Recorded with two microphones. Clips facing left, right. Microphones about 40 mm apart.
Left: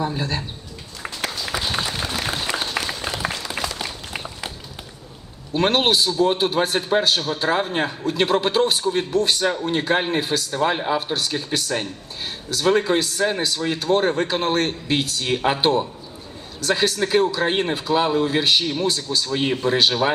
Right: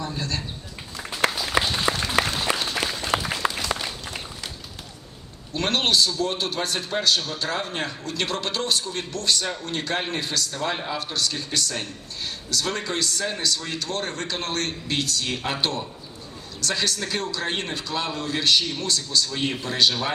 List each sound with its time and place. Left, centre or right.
0.0 s a man's voice: centre
1.9 s applause: right
2.2 s applause: centre
3.2 s a sound: centre
5.5 s a man's voice: centre